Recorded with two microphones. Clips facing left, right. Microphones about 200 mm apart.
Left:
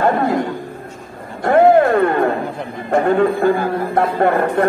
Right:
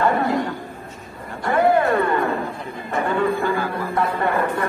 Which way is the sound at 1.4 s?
50° left (ahead or behind).